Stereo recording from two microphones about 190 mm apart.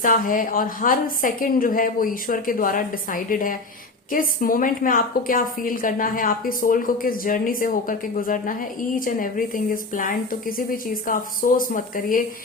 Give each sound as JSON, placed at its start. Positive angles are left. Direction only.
{"t": 0.0, "sound": "a woman's voice", "side_deg": 45}